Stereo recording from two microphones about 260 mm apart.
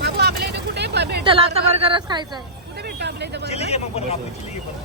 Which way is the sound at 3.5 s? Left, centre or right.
Left.